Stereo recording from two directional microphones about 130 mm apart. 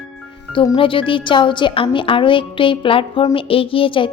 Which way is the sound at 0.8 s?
40° left (ahead or behind).